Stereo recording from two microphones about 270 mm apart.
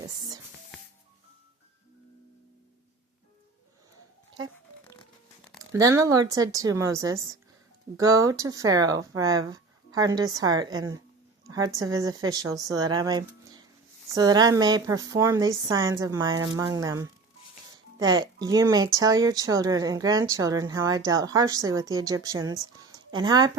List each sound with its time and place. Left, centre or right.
5.7 s speech: centre